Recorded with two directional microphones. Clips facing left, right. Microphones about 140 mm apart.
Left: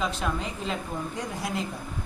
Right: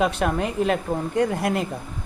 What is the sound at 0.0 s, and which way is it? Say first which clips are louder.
Speech: right 7 dB; 65° right (ahead or behind).